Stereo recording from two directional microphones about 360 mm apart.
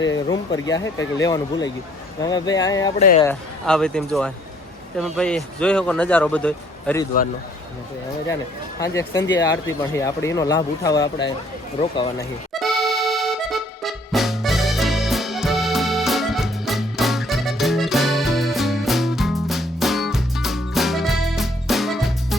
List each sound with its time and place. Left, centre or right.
0.3 s speech: centre
3.0 s speech: left
3.2 s speech: centre
9.0 s speech: centre
12.5 s accordion: centre